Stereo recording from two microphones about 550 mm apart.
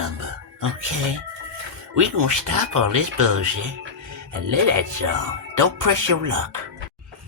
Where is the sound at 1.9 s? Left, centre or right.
Right.